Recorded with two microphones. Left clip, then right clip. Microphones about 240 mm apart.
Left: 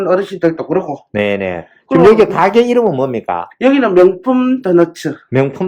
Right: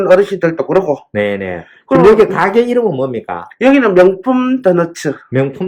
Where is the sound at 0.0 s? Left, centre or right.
Centre.